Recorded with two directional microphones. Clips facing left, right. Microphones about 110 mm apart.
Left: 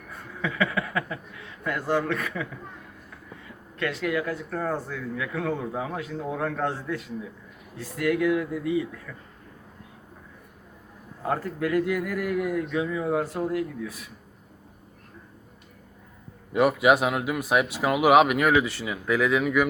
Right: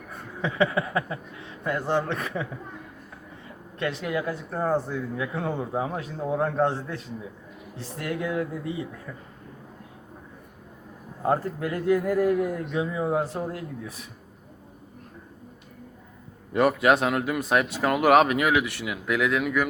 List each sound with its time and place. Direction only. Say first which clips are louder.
0.1 s speech: right 1 dB; 25° right (ahead or behind)
11.3 s speech: right 1 dB; 25° right (ahead or behind)
16.5 s speech: even; 5° left (ahead or behind)